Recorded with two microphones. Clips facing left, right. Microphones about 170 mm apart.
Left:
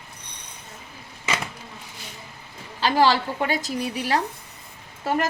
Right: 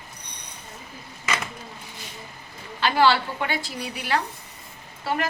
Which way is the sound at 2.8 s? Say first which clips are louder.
Left 1 dB; 35° left (ahead or behind).